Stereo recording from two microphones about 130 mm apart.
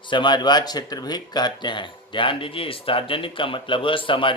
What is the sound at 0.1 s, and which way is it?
Speech, 35° left (ahead or behind).